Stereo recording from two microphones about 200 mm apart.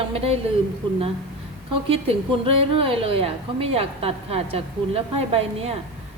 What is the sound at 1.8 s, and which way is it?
A woman's voice, 30° right (ahead or behind).